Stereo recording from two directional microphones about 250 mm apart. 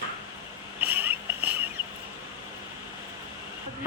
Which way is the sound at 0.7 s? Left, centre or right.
Centre.